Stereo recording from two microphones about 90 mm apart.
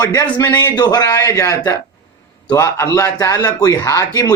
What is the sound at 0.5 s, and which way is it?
Speech, 50° left (ahead or behind).